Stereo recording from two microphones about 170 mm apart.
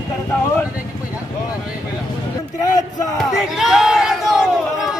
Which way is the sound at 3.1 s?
Centre (ahead or behind).